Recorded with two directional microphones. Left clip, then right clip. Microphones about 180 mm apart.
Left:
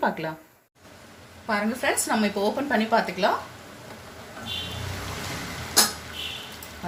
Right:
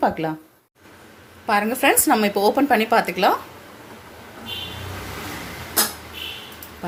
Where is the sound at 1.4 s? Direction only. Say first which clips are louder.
Right 7 dB; 45° right (ahead or behind).